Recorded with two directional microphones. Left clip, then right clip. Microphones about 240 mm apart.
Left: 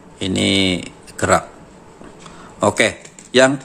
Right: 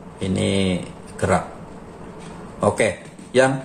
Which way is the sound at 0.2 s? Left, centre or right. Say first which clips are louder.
Left 5 dB; left.